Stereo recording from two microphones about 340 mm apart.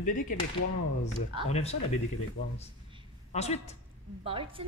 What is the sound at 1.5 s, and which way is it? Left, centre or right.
Speech, centre.